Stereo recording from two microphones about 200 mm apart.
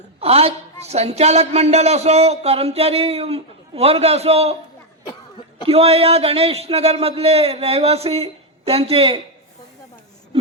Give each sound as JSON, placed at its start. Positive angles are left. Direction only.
{"t": 0.2, "sound": "a woman's voice", "side_deg": -30}
{"t": 5.6, "sound": "a man's voice", "side_deg": -30}